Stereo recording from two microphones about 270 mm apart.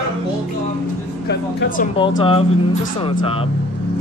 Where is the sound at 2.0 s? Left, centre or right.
Centre.